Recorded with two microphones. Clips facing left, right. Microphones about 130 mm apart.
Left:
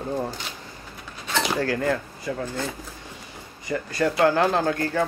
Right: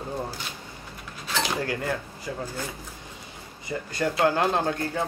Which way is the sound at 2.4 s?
10° right (ahead or behind).